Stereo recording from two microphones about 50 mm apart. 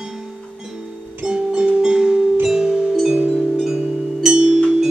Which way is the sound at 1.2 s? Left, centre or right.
Centre.